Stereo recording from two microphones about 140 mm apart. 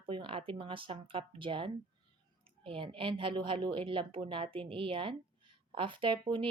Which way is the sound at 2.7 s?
40° right (ahead or behind).